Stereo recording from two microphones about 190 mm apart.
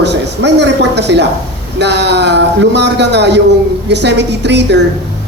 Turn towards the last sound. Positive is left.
turn(degrees=-65)  # may be behind; listen again after turning